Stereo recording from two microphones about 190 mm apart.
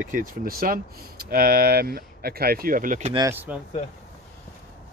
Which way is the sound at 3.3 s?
10° right (ahead or behind).